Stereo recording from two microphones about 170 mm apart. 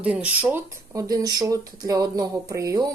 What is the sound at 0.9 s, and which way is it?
Speech, 20° right (ahead or behind).